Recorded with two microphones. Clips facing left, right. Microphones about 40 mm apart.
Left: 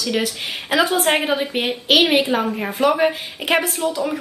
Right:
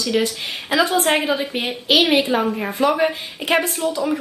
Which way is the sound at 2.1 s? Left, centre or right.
Centre.